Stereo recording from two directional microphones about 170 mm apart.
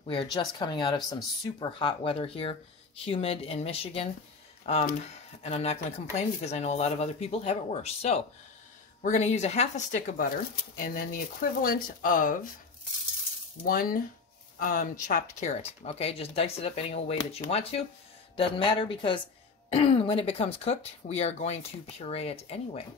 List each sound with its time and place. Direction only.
0.0 s speech: 30° left (ahead or behind)
5.4 s speech: 40° left (ahead or behind)
10.8 s speech: 60° left (ahead or behind)
13.7 s speech: 60° left (ahead or behind); by 22.8 s 35° left (ahead or behind)